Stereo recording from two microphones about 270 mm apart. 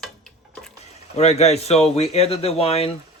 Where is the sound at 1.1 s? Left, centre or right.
Left.